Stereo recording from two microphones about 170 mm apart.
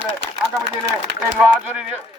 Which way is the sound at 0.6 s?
85° right.